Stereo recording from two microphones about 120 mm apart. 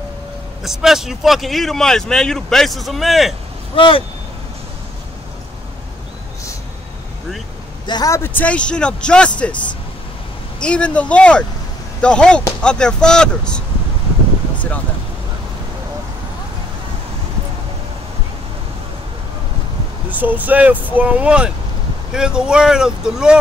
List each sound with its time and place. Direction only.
0.7 s speech: 5° right (ahead or behind)
3.7 s speech: 45° left (ahead or behind)
7.8 s a man's voice: 35° left (ahead or behind)
8.1 s speech: 15° left (ahead or behind)
10.6 s speech: 10° left (ahead or behind)
20.1 s speech: 15° right (ahead or behind)